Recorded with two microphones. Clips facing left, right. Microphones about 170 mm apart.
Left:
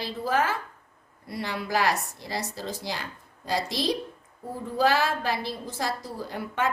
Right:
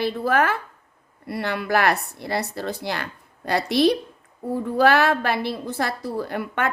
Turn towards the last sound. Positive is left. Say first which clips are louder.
# right 3 dB
turn(degrees=-65)  # may be behind; listen again after turning